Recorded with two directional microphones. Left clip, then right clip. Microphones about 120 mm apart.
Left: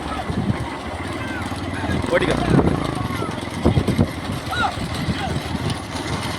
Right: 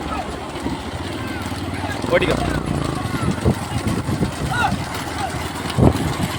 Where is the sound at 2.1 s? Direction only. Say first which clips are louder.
Right 2 dB; centre (ahead or behind).